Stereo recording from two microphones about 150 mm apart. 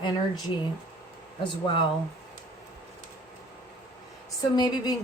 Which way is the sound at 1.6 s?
35° left (ahead or behind).